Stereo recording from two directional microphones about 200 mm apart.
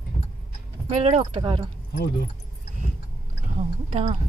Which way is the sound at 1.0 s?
30° right (ahead or behind).